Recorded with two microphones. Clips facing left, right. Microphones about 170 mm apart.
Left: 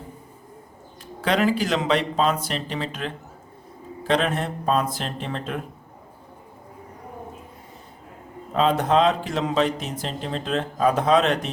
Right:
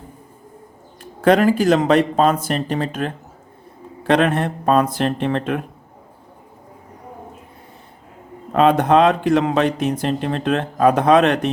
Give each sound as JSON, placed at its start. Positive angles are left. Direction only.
{"t": 1.2, "sound": "speech", "side_deg": -50}
{"t": 4.0, "sound": "speech", "side_deg": -60}
{"t": 8.5, "sound": "speech", "side_deg": -60}